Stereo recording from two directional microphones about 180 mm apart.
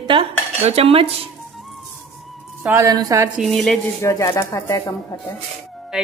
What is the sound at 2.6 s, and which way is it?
Speech, 15° right (ahead or behind).